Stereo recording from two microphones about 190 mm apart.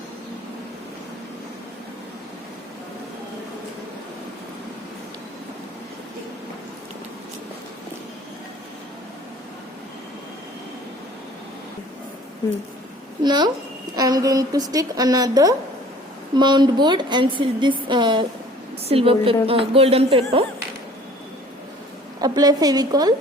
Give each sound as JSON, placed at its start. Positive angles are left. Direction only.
{"t": 13.2, "sound": "a woman's voice", "side_deg": -20}
{"t": 22.2, "sound": "a woman's voice", "side_deg": -20}